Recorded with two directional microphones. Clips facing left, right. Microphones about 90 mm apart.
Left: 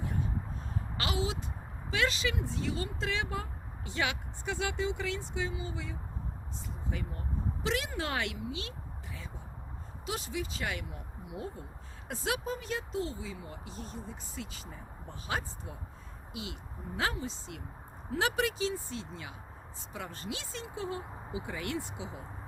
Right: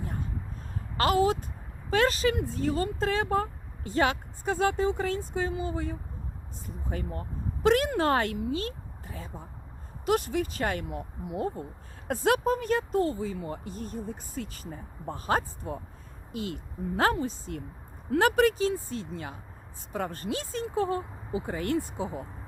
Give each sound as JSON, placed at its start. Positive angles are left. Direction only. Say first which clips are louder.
{"t": 0.0, "sound": "a sound", "louder": "even", "side_deg": -45}
{"t": 0.9, "sound": "speech", "louder": "right 11 dB", "side_deg": -45}
{"t": 10.1, "sound": "speech", "louder": "right 10 dB", "side_deg": -55}